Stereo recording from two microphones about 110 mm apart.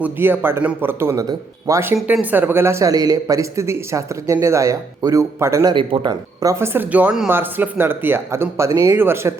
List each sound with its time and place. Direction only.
0.0 s speech: 20° right (ahead or behind)
5.7 s speech: 50° right (ahead or behind)
6.1 s speech: 30° right (ahead or behind)
6.7 s speech: 15° right (ahead or behind)